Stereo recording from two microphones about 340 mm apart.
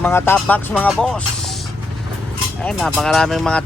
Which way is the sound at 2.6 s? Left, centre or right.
Centre.